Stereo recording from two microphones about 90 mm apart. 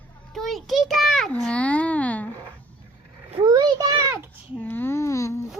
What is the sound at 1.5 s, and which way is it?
Speech, 15° left (ahead or behind).